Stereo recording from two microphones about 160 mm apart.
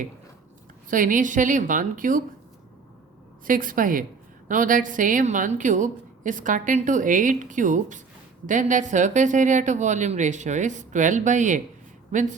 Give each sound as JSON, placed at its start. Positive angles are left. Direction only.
{"t": 0.9, "sound": "a woman's voice", "side_deg": -55}
{"t": 3.4, "sound": "a woman's voice", "side_deg": -60}